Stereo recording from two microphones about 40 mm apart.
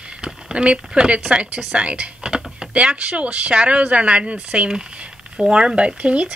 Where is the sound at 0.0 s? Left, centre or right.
Right.